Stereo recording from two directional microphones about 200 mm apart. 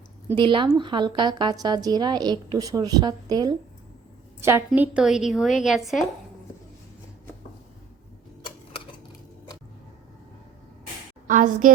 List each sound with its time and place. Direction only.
0.3 s a woman's voice: 25° right (ahead or behind); by 6.1 s centre (ahead or behind)
11.3 s a woman's voice: 40° right (ahead or behind)